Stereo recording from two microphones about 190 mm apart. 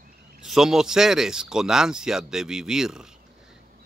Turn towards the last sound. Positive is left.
turn(degrees=-5)  # may be behind; listen again after turning